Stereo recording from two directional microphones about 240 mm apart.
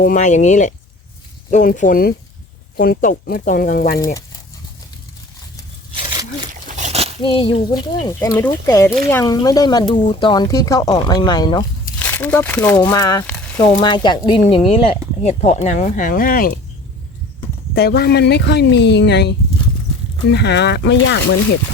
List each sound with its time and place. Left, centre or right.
0.0 s speech: left
3.9 s speech: centre
6.5 s a sound: right
7.2 s speech: left
11.9 s speech: centre
13.3 s a sound: centre
13.8 s speech: centre; by 16.6 s left
17.7 s speech: left